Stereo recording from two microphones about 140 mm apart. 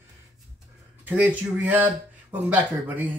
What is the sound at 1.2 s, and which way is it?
Speech, 10° right (ahead or behind).